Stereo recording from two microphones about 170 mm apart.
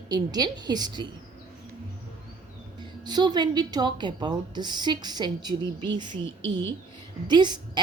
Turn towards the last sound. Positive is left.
turn(degrees=-25)  # may be behind; listen again after turning